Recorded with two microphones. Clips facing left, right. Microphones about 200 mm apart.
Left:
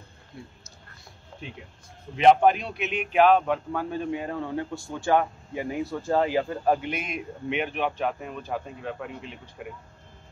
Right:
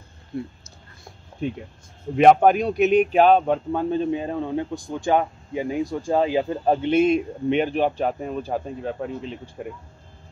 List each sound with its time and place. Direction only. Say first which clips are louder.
0.3 s speech: right 13 dB; 55° right (ahead or behind)
2.1 s speech: right 4 dB; 50° right (ahead or behind); by 9.4 s 35° right (ahead or behind)